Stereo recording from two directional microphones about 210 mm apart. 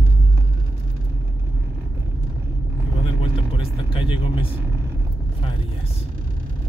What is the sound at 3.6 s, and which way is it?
Vehicle, 25° left (ahead or behind).